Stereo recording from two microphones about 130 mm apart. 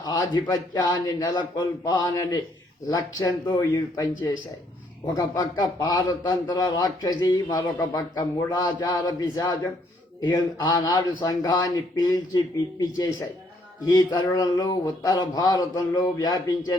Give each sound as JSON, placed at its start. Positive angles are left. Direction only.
{"t": 0.0, "sound": "a man's voice", "side_deg": 30}
{"t": 5.1, "sound": "a man's voice", "side_deg": 25}